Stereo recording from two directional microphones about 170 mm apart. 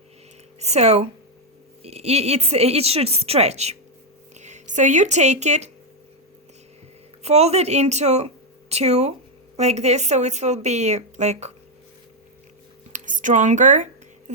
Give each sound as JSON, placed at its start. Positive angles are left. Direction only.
{"t": 0.6, "sound": "a woman's voice", "side_deg": -40}
{"t": 7.2, "sound": "a woman's voice", "side_deg": -40}
{"t": 12.9, "sound": "speech", "side_deg": -50}
{"t": 14.3, "sound": "a sound", "side_deg": -45}